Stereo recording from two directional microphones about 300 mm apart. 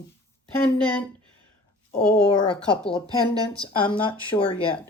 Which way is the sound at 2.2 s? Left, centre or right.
Centre.